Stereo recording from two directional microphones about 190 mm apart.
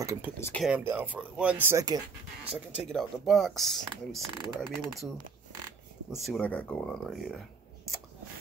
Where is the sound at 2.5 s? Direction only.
Centre (ahead or behind).